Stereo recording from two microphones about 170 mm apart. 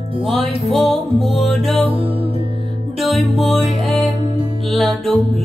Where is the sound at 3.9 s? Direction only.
40° left (ahead or behind).